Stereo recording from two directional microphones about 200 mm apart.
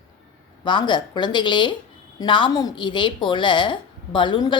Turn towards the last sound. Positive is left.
turn(degrees=20)  # may be behind; listen again after turning